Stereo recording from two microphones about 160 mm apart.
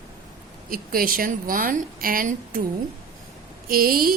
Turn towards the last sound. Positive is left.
turn(degrees=-65)  # may be behind; listen again after turning